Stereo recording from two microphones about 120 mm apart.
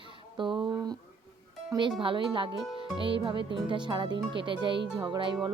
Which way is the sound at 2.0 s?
45° right (ahead or behind).